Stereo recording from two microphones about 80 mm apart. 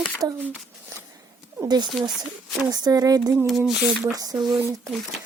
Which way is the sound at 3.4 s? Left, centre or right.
Centre.